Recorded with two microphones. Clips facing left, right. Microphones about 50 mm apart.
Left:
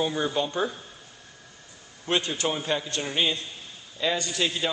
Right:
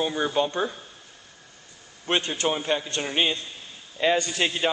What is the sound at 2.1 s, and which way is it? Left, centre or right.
Speech, right.